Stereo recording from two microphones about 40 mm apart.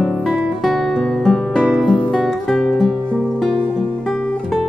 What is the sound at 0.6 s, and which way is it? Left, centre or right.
Guitar, centre.